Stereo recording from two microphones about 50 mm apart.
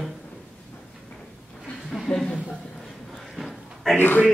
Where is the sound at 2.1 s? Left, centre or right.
Centre.